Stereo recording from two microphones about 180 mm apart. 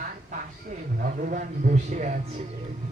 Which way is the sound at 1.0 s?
55° right (ahead or behind).